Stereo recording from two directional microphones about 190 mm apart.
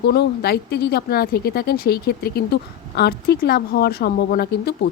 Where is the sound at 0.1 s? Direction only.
60° left (ahead or behind).